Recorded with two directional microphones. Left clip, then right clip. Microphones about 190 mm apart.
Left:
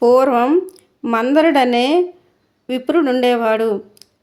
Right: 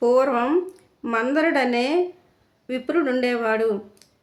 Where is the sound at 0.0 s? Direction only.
35° left (ahead or behind).